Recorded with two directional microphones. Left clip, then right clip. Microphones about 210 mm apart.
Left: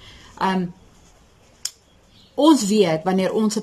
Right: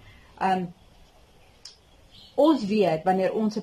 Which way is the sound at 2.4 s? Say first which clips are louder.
Left 5 dB; centre (ahead or behind).